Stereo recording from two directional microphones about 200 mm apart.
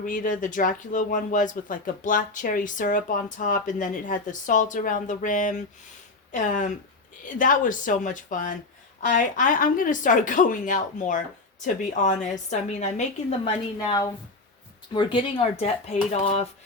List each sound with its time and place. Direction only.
0.0 s speech: 40° left (ahead or behind)